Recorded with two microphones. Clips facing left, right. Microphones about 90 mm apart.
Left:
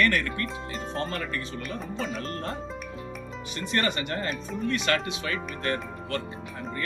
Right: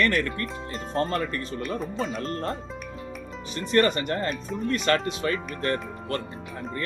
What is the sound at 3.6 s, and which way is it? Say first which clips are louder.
Speech: right 6 dB; 40° right (ahead or behind).